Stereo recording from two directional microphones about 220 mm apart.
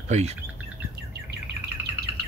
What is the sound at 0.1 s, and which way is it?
Speech, 30° right (ahead or behind).